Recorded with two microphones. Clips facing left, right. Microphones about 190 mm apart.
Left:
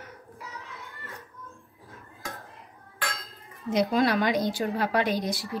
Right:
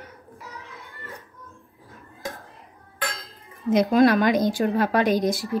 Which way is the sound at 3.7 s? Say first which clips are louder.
Right 6 dB; 50° right (ahead or behind).